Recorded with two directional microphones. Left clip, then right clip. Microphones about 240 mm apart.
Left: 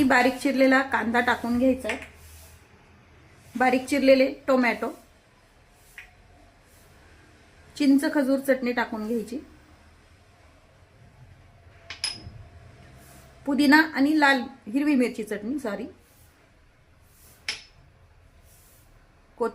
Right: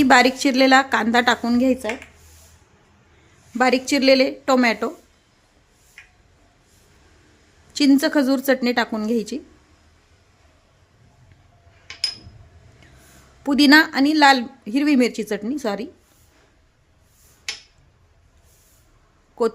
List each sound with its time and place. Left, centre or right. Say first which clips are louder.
0.0 s a woman's voice: right 6 dB; right
3.6 s a woman's voice: right 4 dB; right
7.7 s a woman's voice: right 5 dB; right
13.4 s a woman's voice: right 6 dB; right